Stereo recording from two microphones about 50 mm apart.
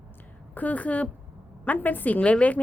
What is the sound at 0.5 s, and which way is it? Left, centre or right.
A woman's voice, left.